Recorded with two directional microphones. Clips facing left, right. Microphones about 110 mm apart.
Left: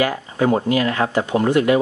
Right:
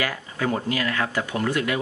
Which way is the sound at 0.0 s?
30° left (ahead or behind).